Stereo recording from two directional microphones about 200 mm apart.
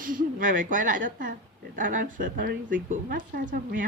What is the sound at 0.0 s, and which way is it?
A woman's voice, 45° right (ahead or behind).